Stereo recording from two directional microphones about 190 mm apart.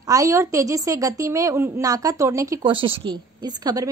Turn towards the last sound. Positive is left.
turn(degrees=-20)  # may be behind; listen again after turning